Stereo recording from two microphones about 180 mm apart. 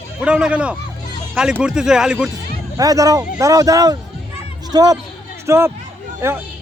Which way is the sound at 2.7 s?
20° right (ahead or behind).